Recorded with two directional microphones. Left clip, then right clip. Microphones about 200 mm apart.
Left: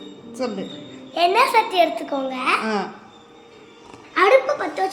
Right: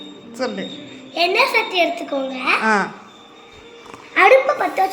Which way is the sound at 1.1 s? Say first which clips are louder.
Even; 15° left (ahead or behind).